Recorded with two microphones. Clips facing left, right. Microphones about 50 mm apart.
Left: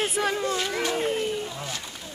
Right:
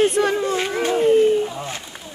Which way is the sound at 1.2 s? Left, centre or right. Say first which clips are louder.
Right 12 dB; centre.